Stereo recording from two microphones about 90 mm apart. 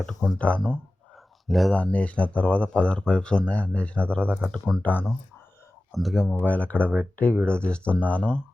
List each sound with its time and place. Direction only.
0.0 s speech: 5° left (ahead or behind)
0.3 s speech: 15° left (ahead or behind)
1.5 s speech: centre (ahead or behind)
1.7 s speech: 15° left (ahead or behind)
4.2 s speech: 20° right (ahead or behind)
4.8 s speech: 20° left (ahead or behind)
5.9 s speech: centre (ahead or behind)
6.4 s speech: 15° left (ahead or behind)